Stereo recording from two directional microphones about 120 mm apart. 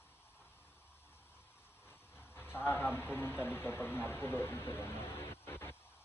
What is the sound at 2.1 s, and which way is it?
Vehicle, 20° left (ahead or behind).